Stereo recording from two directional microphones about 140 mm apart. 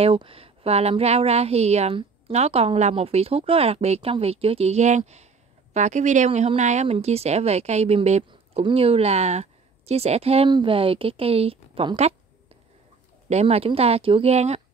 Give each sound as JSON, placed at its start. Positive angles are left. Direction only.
{"t": 0.0, "sound": "a woman's voice", "side_deg": -40}
{"t": 8.3, "sound": "a woman's voice", "side_deg": -40}